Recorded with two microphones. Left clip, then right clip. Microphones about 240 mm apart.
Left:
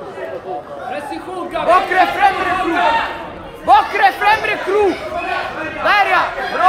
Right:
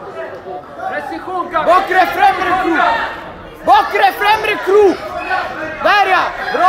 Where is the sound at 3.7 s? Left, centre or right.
Right.